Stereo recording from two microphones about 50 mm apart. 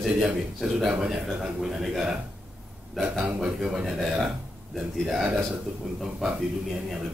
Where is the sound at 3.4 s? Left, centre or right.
Centre.